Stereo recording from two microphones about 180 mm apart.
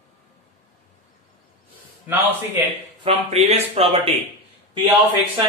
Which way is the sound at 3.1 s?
35° right (ahead or behind).